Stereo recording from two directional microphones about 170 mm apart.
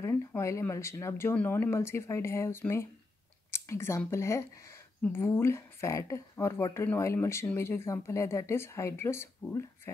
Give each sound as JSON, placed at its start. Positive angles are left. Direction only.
{"t": 0.0, "sound": "speech", "side_deg": 15}